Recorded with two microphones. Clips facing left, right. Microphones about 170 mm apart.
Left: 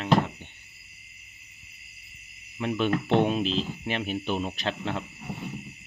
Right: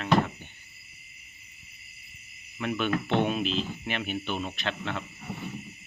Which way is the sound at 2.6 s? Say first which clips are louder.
Left 2 dB; 30° left (ahead or behind).